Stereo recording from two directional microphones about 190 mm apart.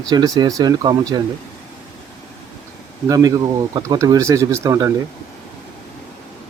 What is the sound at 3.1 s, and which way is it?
Speech, 20° right (ahead or behind).